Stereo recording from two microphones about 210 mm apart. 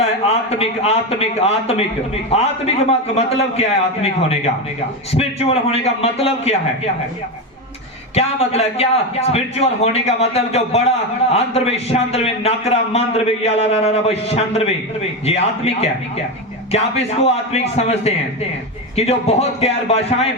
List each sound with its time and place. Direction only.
0.0 s a man's voice: 30° left (ahead or behind)
3.2 s a man's voice: 30° left (ahead or behind)
8.1 s a man's voice: 30° left (ahead or behind)